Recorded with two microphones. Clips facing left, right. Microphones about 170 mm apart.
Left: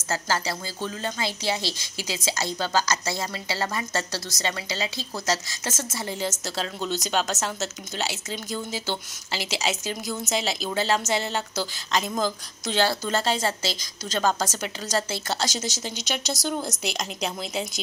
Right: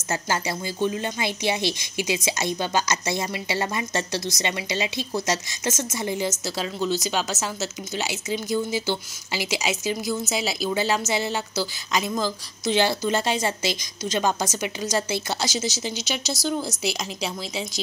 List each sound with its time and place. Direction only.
0.1 s a woman's voice: 20° right (ahead or behind); by 17.6 s 5° right (ahead or behind)